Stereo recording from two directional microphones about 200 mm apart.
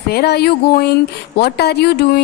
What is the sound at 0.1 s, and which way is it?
Speech, 55° left (ahead or behind).